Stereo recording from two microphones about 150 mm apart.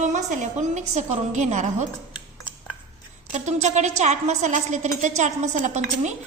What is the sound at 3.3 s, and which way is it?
A woman's voice, 50° right (ahead or behind).